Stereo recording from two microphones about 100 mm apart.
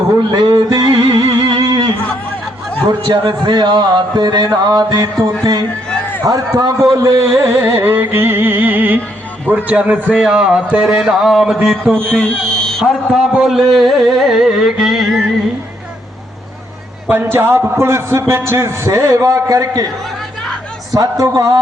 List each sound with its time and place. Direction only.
0.2 s a sound: 45° right (ahead or behind)
3.1 s a sound: 50° right (ahead or behind)
6.2 s a man's voice: 40° right (ahead or behind); by 12.8 s 5° left (ahead or behind)
12.8 s a man's voice: 5° right (ahead or behind)
17.3 s speech: 25° right (ahead or behind)
20.9 s a man's voice: 35° right (ahead or behind)